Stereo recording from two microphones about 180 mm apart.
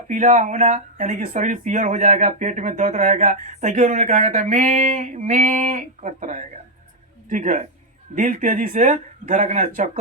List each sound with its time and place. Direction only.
0.1 s speech: 45° right (ahead or behind)